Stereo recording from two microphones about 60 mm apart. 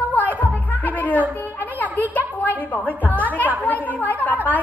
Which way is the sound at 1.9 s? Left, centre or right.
Left.